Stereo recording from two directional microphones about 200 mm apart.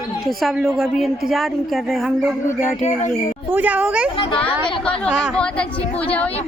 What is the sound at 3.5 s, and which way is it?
Speech, 10° right (ahead or behind).